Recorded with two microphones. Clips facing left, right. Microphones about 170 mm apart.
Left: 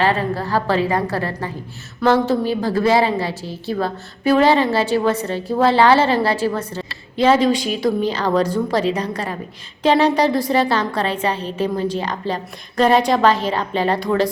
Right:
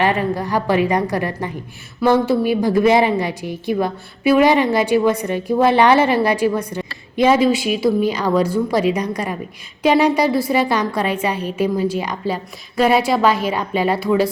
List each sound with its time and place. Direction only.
0.0 s a woman's voice: 15° right (ahead or behind)